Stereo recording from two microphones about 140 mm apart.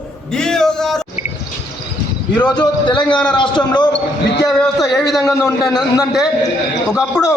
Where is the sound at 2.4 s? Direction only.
30° left (ahead or behind).